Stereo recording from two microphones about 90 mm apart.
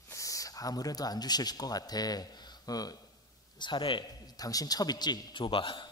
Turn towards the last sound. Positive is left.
turn(degrees=65)  # may be behind; listen again after turning